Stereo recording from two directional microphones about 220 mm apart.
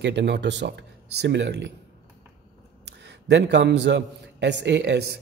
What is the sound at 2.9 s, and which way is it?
A man's voice, 55° right (ahead or behind).